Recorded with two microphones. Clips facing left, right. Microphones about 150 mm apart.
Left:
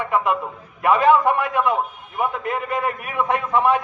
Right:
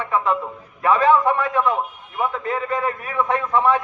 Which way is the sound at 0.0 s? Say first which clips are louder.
Even; 15° left (ahead or behind).